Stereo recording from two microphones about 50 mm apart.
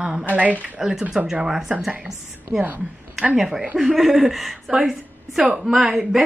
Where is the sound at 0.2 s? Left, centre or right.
Right.